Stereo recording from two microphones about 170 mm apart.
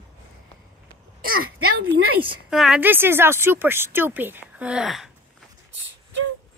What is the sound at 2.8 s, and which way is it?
Speech, 10° right (ahead or behind).